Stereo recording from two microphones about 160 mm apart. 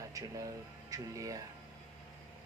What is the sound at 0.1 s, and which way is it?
Speech, 20° right (ahead or behind).